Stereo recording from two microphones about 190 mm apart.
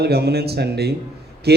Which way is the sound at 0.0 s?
60° right (ahead or behind).